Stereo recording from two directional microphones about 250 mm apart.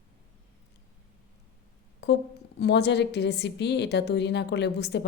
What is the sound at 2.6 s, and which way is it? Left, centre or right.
A woman's voice, left.